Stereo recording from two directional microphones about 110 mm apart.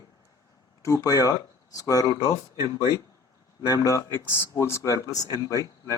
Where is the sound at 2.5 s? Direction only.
30° right (ahead or behind).